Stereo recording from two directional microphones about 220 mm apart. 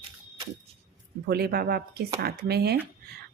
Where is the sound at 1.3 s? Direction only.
45° right (ahead or behind).